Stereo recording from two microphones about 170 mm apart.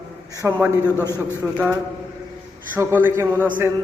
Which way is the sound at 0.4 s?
15° right (ahead or behind).